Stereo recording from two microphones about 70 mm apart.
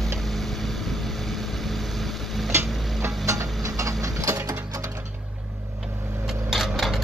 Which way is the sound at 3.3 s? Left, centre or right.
Right.